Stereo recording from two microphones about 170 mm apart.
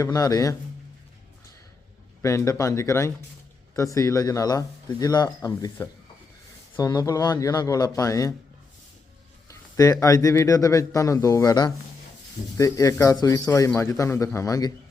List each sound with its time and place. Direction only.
0.0 s speech: 20° left (ahead or behind)
2.2 s speech: 15° left (ahead or behind)
6.7 s speech: 20° left (ahead or behind)
9.5 s speech: 20° left (ahead or behind)